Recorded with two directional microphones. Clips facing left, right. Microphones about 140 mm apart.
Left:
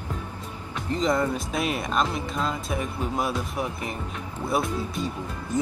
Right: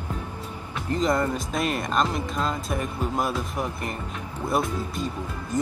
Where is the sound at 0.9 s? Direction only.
Centre (ahead or behind).